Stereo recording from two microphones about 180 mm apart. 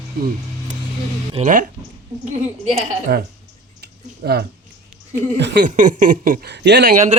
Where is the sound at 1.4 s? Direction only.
45° right (ahead or behind).